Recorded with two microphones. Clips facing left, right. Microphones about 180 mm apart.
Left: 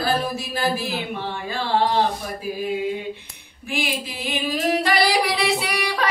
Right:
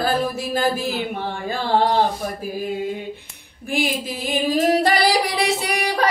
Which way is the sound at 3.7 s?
45° right (ahead or behind).